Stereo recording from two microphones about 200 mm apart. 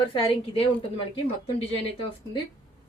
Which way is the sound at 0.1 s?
25° left (ahead or behind).